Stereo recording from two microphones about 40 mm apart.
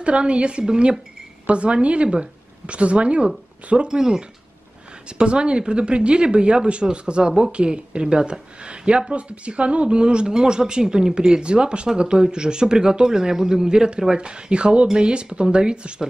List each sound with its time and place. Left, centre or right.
0.0 s speech: right
5.1 s speech: right